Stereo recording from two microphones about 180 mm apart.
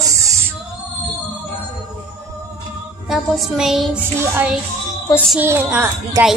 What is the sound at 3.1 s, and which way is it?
A woman's voice, centre (ahead or behind).